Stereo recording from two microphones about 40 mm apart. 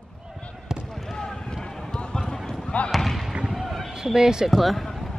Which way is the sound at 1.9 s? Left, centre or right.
Centre.